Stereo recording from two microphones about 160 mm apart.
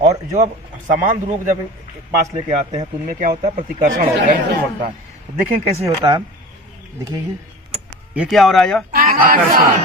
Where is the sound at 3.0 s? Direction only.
55° right (ahead or behind).